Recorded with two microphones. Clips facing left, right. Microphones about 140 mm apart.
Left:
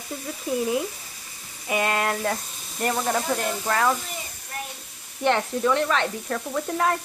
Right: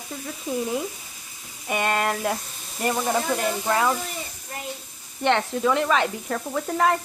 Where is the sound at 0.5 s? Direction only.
Centre (ahead or behind).